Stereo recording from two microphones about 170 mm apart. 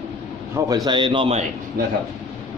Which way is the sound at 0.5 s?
20° right (ahead or behind).